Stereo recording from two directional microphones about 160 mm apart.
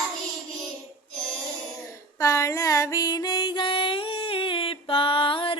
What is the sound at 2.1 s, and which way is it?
Music, 20° left (ahead or behind).